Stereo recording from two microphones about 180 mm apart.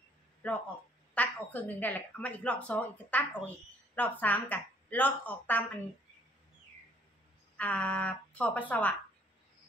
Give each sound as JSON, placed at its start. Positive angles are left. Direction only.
{"t": 0.4, "sound": "a woman's voice", "side_deg": 5}
{"t": 7.5, "sound": "a woman's voice", "side_deg": 10}